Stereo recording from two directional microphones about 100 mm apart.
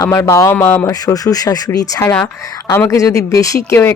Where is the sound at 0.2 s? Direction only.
30° left (ahead or behind).